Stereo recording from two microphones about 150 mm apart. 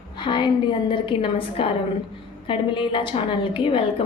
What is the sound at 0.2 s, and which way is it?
A woman's voice, 30° left (ahead or behind).